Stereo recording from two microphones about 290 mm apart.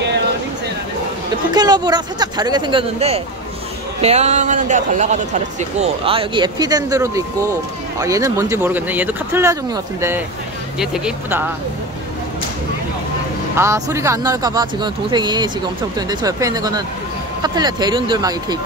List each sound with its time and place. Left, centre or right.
1.5 s a man's voice: centre
13.6 s speech: centre